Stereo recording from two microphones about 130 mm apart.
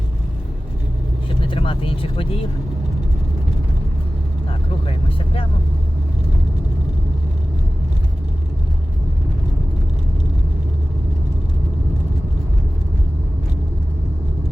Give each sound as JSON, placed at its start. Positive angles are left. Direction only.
{"t": 1.5, "sound": "speech", "side_deg": 45}
{"t": 4.9, "sound": "speech", "side_deg": 45}